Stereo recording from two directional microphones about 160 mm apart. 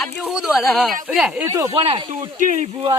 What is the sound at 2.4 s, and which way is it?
Speech, 50° right (ahead or behind).